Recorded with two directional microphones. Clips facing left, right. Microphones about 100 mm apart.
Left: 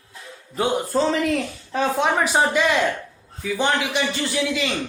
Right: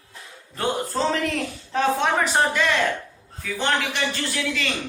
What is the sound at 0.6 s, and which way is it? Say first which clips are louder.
A man's voice: left 4 dB; 5° left (ahead or behind).